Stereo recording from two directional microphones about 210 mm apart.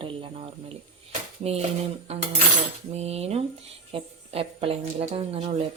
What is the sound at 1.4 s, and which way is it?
Speech, 30° right (ahead or behind).